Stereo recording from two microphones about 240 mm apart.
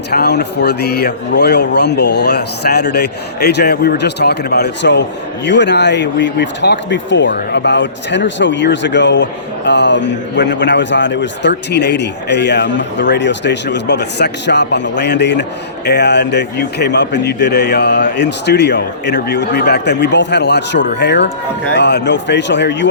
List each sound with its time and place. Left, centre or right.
0.1 s a man's voice: left